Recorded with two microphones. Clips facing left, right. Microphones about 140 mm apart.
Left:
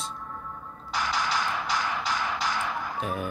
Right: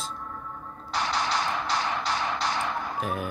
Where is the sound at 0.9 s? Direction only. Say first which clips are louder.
Right 1 dB; 35° right (ahead or behind).